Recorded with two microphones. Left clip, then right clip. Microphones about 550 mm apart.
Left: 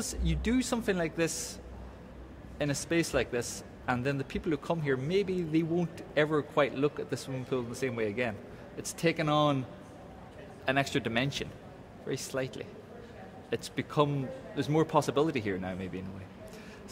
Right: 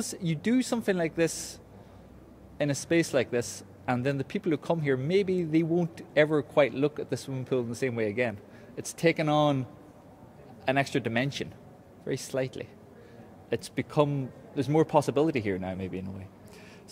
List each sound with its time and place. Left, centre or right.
0.0 s speech: right
2.6 s speech: right